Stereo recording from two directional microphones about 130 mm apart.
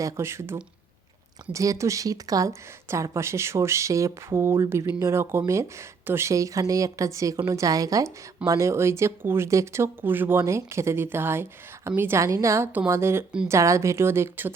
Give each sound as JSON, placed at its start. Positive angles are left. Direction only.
{"t": 0.0, "sound": "speech", "side_deg": -20}